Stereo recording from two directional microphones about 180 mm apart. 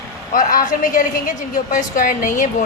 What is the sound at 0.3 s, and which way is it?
A woman's voice, 45° left (ahead or behind).